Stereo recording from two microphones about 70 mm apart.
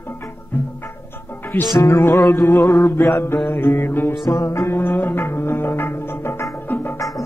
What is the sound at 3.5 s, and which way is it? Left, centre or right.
Music, left.